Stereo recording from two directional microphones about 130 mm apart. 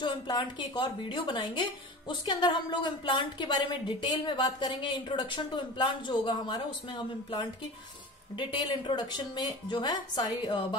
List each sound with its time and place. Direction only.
0.0 s a woman's voice: 35° left (ahead or behind)